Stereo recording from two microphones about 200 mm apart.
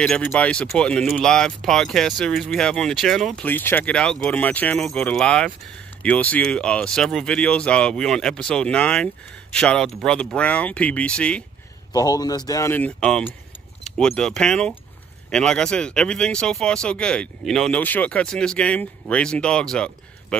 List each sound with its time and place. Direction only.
0.0 s speech: 5° left (ahead or behind)
11.9 s speech: 20° left (ahead or behind)